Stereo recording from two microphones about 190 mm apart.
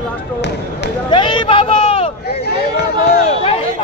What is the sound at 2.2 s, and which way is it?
Speech, 55° left (ahead or behind).